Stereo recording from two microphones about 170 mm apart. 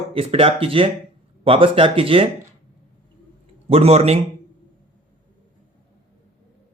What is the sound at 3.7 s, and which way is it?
Speech, 35° right (ahead or behind).